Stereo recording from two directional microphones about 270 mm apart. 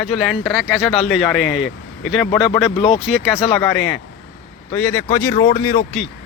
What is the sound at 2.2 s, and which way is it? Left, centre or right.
Speech, left.